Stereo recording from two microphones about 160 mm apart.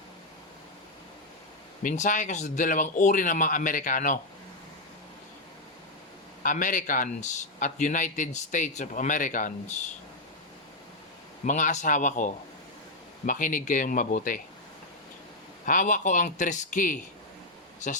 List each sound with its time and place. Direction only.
1.8 s speech: 55° left (ahead or behind)
6.4 s speech: 55° left (ahead or behind)
11.4 s speech: 50° left (ahead or behind)
15.6 s speech: 55° left (ahead or behind)